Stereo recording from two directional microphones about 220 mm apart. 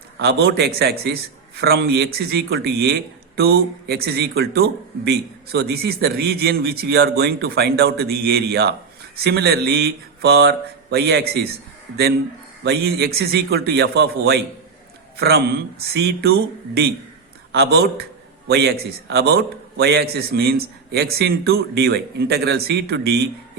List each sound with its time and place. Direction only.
0.2 s speech: 50° right (ahead or behind)
12.6 s speech: 50° right (ahead or behind)
17.5 s speech: 45° right (ahead or behind)